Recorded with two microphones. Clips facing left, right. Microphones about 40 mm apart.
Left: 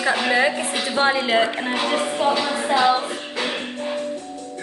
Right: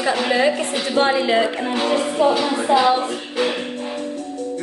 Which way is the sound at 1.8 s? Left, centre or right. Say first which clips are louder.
Right 4 dB; left.